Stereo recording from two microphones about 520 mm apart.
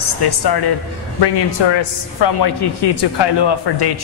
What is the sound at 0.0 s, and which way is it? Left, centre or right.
A man's voice, left.